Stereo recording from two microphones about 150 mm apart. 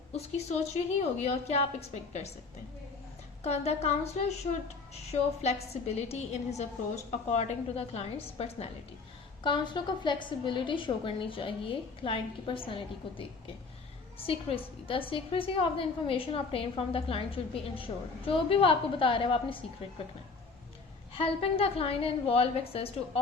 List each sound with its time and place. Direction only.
0.1 s a woman's voice: 45° left (ahead or behind)
3.4 s a woman's voice: 45° left (ahead or behind)
5.4 s a woman's voice: 45° left (ahead or behind)
9.4 s a woman's voice: 30° left (ahead or behind)
14.3 s a woman's voice: 40° left (ahead or behind)
21.1 s a woman's voice: 40° left (ahead or behind)